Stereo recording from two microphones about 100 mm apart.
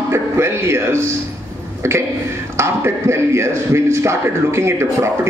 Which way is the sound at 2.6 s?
25° right (ahead or behind).